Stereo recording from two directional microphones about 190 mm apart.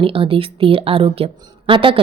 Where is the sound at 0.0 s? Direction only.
30° right (ahead or behind).